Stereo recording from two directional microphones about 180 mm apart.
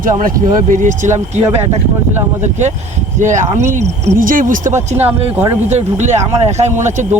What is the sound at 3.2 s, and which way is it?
Speech, 45° right (ahead or behind).